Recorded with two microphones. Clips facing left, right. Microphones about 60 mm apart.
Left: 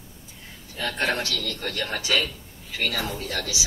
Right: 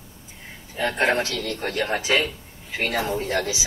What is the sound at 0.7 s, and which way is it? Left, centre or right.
A man's voice, right.